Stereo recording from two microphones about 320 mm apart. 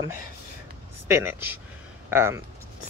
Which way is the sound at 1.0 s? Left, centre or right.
Centre.